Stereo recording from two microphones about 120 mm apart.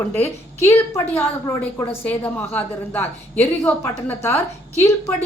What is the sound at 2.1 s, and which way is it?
A woman's voice, 15° left (ahead or behind).